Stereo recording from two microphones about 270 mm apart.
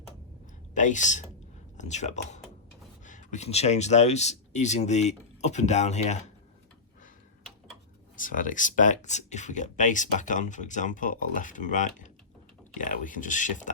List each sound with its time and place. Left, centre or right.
0.7 s speech: left
8.2 s speech: left